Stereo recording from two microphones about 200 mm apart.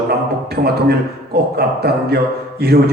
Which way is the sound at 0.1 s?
50° right (ahead or behind).